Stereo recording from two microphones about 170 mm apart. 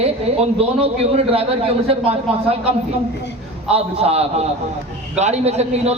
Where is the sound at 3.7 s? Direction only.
35° right (ahead or behind).